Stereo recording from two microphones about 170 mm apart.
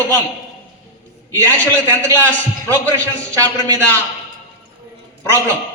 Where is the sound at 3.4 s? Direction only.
20° right (ahead or behind).